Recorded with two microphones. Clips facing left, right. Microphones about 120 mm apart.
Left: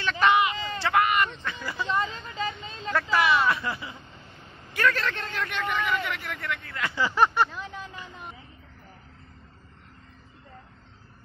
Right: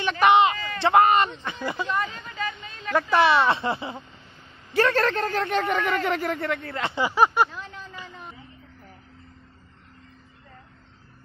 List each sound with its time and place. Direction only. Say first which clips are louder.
0.0 s speech: right 4 dB; 20° right (ahead or behind)
1.9 s vehicle: even; 25° left (ahead or behind)
2.9 s speech: right 4 dB; 15° right (ahead or behind)
3.2 s speech: right 4 dB; 30° right (ahead or behind)
5.0 s speech: right 7 dB; 40° right (ahead or behind)
6.8 s speech: right 2 dB; 20° right (ahead or behind)
7.5 s a sound: left 1 dB; 5° left (ahead or behind)